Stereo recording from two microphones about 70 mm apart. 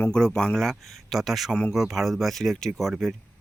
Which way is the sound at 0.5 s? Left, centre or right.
Centre.